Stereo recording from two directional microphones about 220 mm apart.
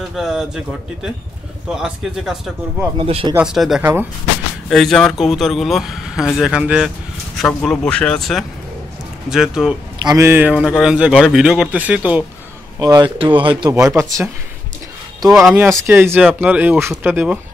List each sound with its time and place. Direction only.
0.1 s a man's voice: centre (ahead or behind)
3.0 s speech: 25° right (ahead or behind)
3.3 s a man's voice: centre (ahead or behind)
10.0 s a man's voice: 10° right (ahead or behind)
12.8 s speech: 20° right (ahead or behind)
15.3 s speech: 5° right (ahead or behind)